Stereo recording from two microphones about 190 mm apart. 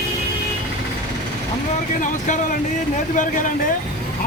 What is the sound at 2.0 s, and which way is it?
Speech, 45° left (ahead or behind).